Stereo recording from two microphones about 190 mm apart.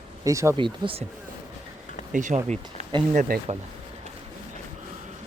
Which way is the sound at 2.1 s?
40° right (ahead or behind).